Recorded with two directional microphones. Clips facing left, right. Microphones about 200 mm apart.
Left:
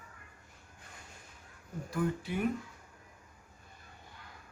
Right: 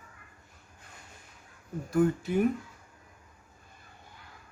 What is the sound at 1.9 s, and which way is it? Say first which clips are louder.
Speech: right 8 dB; 45° right (ahead or behind).